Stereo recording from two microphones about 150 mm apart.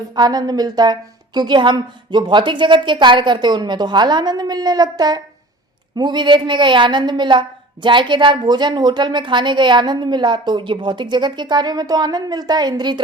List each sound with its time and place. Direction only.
0.2 s a woman's voice: 25° right (ahead or behind)